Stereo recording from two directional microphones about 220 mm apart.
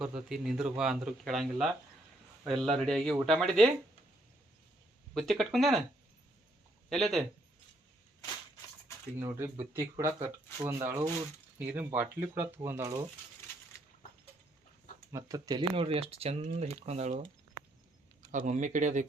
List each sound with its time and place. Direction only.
0.0 s speech: centre (ahead or behind)
5.1 s speech: centre (ahead or behind)
6.9 s speech: centre (ahead or behind)
9.1 s speech: 15° right (ahead or behind)
15.1 s speech: 15° right (ahead or behind)
18.3 s speech: 35° right (ahead or behind)